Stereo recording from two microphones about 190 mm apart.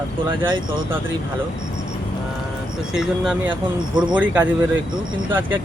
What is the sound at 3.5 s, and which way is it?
Speech, 25° right (ahead or behind).